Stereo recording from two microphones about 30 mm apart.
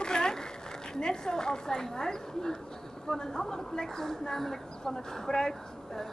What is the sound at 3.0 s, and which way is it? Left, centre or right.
A woman's voice, centre.